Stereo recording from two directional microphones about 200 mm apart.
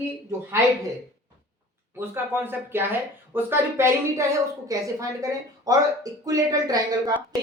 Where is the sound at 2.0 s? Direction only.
10° right (ahead or behind).